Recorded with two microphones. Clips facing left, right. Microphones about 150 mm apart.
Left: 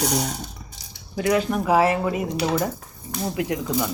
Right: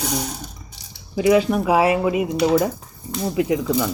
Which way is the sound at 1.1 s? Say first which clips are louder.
Right 5 dB; 5° right (ahead or behind).